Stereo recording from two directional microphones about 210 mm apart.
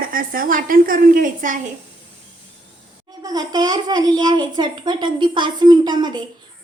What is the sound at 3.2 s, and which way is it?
A woman's voice, 20° right (ahead or behind).